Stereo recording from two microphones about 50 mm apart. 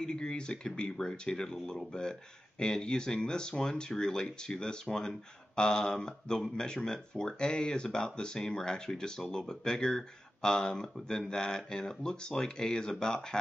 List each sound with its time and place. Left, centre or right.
0.0 s speech: centre